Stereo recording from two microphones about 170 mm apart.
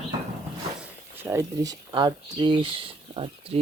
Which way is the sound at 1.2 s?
20° right (ahead or behind).